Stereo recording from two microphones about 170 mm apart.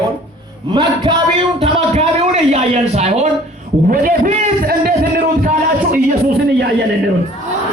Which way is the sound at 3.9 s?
50° right (ahead or behind).